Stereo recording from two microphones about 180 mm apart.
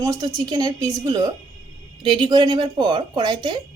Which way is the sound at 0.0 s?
20° right (ahead or behind).